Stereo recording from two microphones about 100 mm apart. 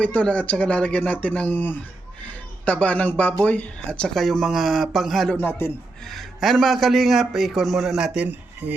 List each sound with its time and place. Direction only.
0.0 s a man's voice: 15° left (ahead or behind)
5.3 s a man's voice: 20° left (ahead or behind)
6.1 s a man's voice: centre (ahead or behind); by 8.7 s 15° right (ahead or behind)